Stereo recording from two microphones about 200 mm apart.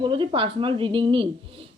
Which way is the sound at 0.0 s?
25° right (ahead or behind).